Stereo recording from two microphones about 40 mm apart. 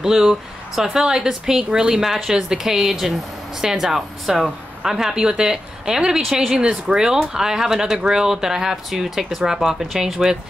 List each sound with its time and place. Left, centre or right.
0.0 s speech: centre